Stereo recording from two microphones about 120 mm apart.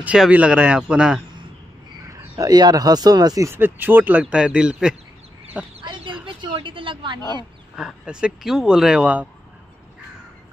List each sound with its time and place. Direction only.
0.0 s speech: 10° right (ahead or behind)
2.0 s speech: 25° right (ahead or behind); by 4.9 s 5° right (ahead or behind)
5.8 s chicken: 45° right (ahead or behind)
6.2 s a woman's voice: 40° right (ahead or behind)
7.7 s speech: 5° right (ahead or behind)